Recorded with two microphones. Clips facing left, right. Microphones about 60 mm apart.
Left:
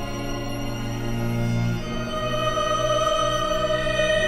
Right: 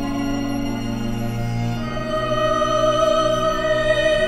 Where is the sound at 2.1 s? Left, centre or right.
Right.